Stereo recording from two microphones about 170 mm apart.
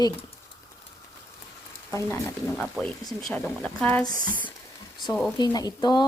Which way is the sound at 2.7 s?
Centre (ahead or behind).